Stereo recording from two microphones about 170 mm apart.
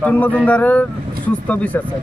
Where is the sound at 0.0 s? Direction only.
10° left (ahead or behind).